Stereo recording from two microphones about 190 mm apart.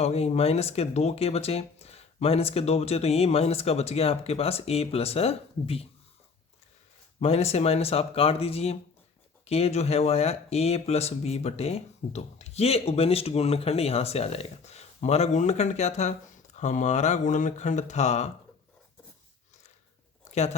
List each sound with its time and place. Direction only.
0.0 s speech: 35° left (ahead or behind)
7.2 s speech: 35° left (ahead or behind)
20.3 s chewing: 40° left (ahead or behind)